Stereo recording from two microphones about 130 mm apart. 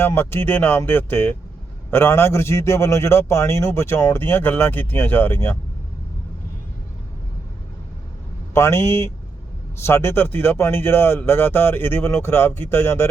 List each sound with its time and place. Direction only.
0.0 s a man's voice: 20° left (ahead or behind)
8.5 s a man's voice: 20° left (ahead or behind)